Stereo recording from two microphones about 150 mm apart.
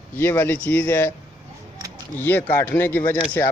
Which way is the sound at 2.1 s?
15° left (ahead or behind).